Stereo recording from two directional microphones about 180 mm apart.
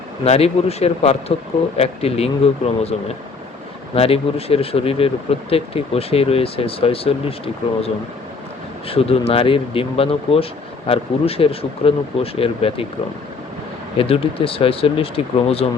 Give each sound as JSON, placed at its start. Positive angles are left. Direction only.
{"t": 0.3, "sound": "speech", "side_deg": 35}
{"t": 8.9, "sound": "speech", "side_deg": 35}
{"t": 14.0, "sound": "speech", "side_deg": 30}